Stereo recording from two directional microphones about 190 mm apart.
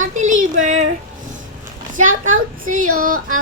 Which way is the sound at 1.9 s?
45° right (ahead or behind).